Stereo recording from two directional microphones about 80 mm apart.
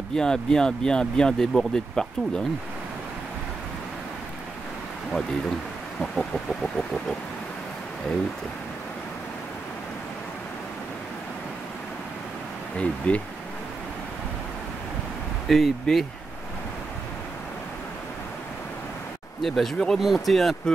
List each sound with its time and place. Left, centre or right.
0.1 s speech: centre
5.9 s speech: centre
12.7 s speech: centre
15.4 s speech: centre
19.4 s speech: centre